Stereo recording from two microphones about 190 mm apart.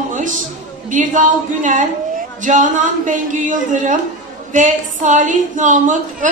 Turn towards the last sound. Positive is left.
turn(degrees=-40)  # may be behind; listen again after turning